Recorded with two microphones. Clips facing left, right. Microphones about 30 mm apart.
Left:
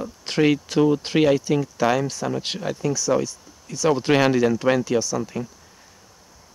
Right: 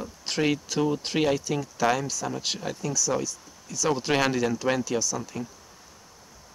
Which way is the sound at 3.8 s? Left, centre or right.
Centre.